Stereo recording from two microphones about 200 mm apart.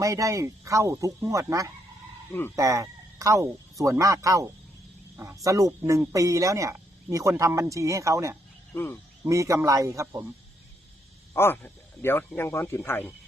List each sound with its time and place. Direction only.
0.0 s speech: 15° right (ahead or behind)
8.7 s speech: 10° left (ahead or behind)
9.2 s speech: 15° right (ahead or behind)
11.3 s speech: 10° left (ahead or behind)